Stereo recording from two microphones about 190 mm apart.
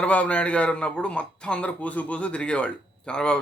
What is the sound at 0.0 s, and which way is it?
A man's voice, 5° left (ahead or behind).